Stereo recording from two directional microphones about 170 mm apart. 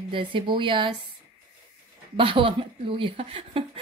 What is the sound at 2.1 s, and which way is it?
A woman's voice, 30° right (ahead or behind).